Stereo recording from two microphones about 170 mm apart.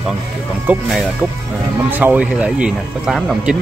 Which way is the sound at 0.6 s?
Centre (ahead or behind).